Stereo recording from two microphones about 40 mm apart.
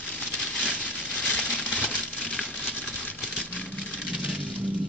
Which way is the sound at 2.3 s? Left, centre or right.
Left.